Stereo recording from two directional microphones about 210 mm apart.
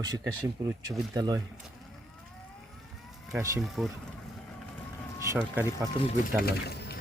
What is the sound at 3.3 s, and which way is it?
Speech, 15° right (ahead or behind).